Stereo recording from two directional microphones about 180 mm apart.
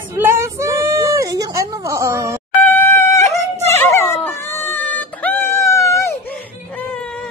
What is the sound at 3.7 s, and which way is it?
Dog, 15° left (ahead or behind).